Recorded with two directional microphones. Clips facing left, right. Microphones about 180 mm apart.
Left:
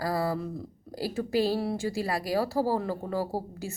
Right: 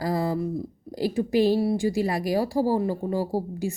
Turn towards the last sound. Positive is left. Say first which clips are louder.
# right 5 dB
turn(degrees=-15)  # may be behind; listen again after turning